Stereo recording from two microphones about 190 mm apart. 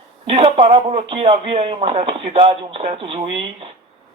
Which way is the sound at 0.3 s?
30° right (ahead or behind).